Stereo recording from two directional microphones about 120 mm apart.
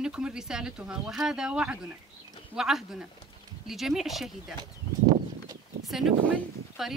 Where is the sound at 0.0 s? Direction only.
5° right (ahead or behind).